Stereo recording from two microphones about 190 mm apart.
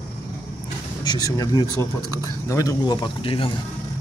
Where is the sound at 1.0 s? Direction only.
20° left (ahead or behind).